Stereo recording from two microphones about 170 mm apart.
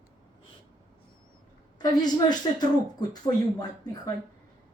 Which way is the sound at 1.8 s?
25° left (ahead or behind).